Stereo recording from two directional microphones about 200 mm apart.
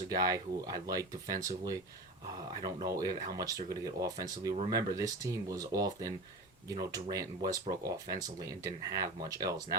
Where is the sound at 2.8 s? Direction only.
15° right (ahead or behind).